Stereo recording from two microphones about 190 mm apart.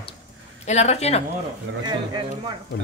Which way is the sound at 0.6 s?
35° left (ahead or behind).